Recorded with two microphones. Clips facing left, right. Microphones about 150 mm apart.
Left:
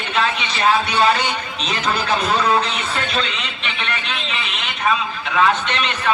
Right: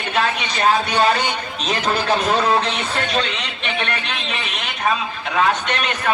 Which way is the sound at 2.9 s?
50° right (ahead or behind).